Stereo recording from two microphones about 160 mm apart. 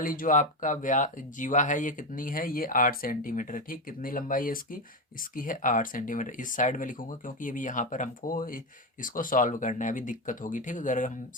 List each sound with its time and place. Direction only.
0.0 s speech: 60° left (ahead or behind)